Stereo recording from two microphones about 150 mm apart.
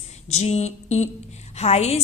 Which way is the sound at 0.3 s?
45° left (ahead or behind).